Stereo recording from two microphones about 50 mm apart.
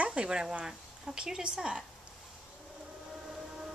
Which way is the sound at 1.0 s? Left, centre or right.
Centre.